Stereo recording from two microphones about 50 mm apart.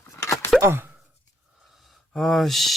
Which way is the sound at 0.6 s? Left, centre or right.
Right.